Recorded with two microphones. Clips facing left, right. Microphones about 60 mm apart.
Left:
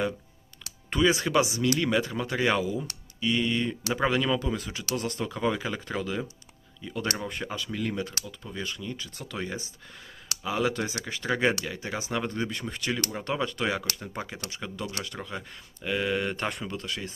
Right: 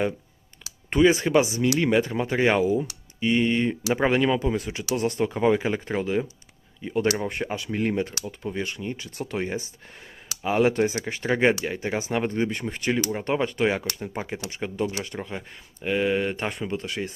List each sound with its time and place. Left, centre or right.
0.9 s speech: right
14.0 s speech: centre
16.6 s speech: right